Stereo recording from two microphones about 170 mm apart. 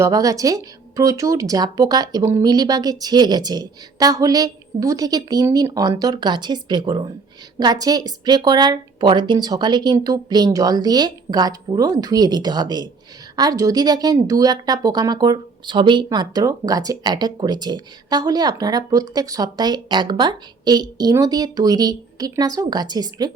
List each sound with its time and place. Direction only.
0.0 s a woman's voice: 20° right (ahead or behind)